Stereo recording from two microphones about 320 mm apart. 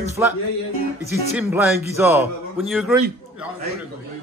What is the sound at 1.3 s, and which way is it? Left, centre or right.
A man's voice, centre.